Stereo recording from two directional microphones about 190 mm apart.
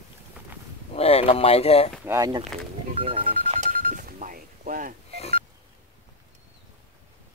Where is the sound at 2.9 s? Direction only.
30° right (ahead or behind).